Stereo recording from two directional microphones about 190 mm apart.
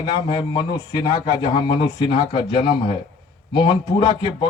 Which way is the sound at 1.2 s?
30° left (ahead or behind).